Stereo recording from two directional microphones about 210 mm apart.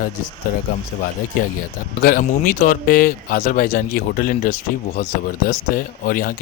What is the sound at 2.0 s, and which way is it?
Speech, 40° left (ahead or behind).